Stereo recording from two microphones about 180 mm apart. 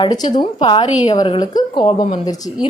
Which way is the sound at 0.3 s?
25° left (ahead or behind).